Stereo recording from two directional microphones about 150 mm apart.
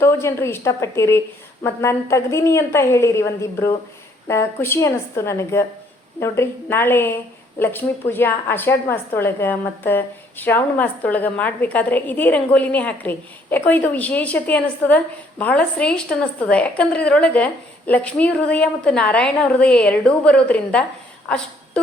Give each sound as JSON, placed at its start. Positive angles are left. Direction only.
{"t": 0.0, "sound": "a woman's voice", "side_deg": 15}